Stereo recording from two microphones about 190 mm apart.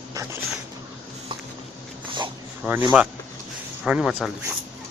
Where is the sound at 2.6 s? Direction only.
5° right (ahead or behind).